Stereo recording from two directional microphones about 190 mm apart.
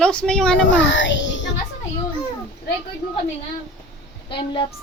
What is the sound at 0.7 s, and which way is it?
Child singing, 75° left (ahead or behind).